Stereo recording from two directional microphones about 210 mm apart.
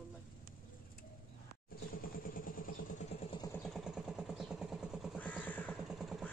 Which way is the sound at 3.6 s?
Centre (ahead or behind).